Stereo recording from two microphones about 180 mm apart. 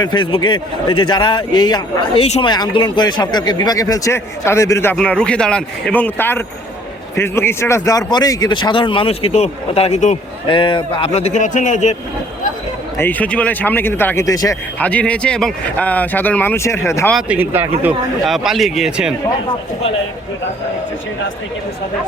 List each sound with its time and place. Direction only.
0.0 s a man's voice: 25° left (ahead or behind)
10.6 s a man's voice: 30° left (ahead or behind)
13.0 s a man's voice: 10° left (ahead or behind)
14.8 s a man's voice: 5° left (ahead or behind)
17.1 s a man's voice: 5° right (ahead or behind)